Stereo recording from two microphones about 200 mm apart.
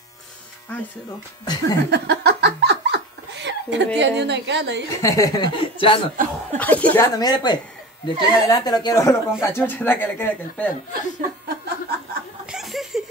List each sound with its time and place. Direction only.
1.4 s speech: 20° left (ahead or behind)
1.9 s laughter: 55° right (ahead or behind)
5.0 s speech: 15° left (ahead or behind)
6.6 s speech: 10° left (ahead or behind)
7.2 s speech: 20° left (ahead or behind)
10.9 s speech: 45° right (ahead or behind)
12.4 s laughter: centre (ahead or behind)